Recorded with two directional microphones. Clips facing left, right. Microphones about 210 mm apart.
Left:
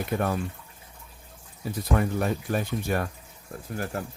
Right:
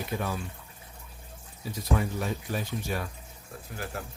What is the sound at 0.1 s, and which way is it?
Speech, 55° left (ahead or behind).